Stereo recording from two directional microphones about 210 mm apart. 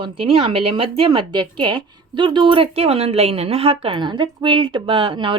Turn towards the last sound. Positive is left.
turn(degrees=-25)  # may be behind; listen again after turning